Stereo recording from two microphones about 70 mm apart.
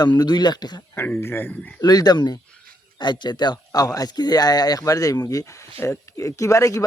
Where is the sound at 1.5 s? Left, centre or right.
Centre.